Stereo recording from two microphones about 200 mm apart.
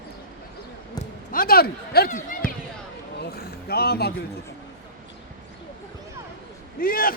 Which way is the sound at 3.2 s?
50° left (ahead or behind).